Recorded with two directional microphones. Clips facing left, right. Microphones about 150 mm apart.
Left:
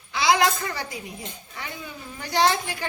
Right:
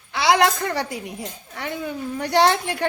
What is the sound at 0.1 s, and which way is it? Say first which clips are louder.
A woman's voice: right 3 dB; 65° right (ahead or behind).